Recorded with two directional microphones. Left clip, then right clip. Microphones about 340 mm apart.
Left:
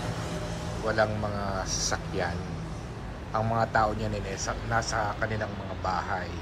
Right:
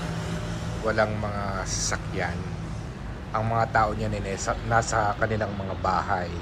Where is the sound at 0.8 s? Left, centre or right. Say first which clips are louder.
Right 2 dB; centre.